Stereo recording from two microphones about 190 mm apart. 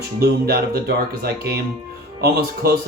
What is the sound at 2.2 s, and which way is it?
Speech, 55° right (ahead or behind).